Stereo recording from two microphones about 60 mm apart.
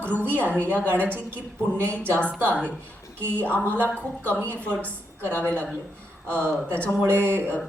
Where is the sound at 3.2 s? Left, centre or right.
Right.